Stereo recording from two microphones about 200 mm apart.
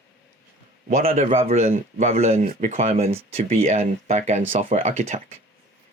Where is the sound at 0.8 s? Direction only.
45° right (ahead or behind).